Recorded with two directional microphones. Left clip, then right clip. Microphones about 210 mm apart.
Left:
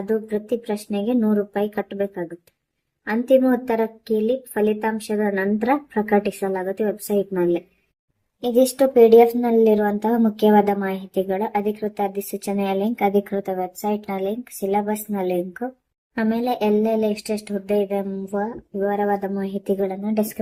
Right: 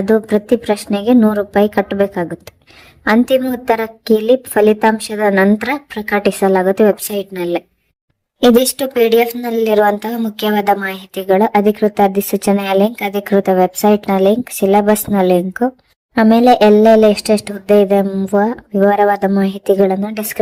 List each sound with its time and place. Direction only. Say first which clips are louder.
0.0 s speech: right 10 dB; 40° right (ahead or behind)